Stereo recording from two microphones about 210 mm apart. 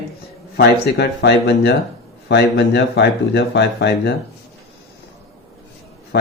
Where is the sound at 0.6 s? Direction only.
50° left (ahead or behind).